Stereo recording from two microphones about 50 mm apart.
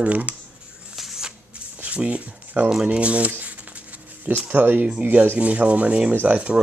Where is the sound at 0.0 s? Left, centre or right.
Right.